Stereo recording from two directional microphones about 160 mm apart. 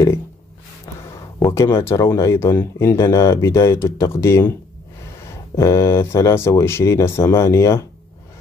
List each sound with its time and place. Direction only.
1.4 s speech: 15° left (ahead or behind)